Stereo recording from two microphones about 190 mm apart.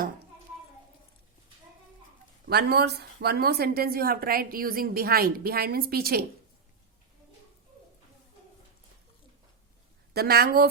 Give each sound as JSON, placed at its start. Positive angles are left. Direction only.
{"t": 2.5, "sound": "a woman's voice", "side_deg": -55}
{"t": 10.2, "sound": "a woman's voice", "side_deg": -55}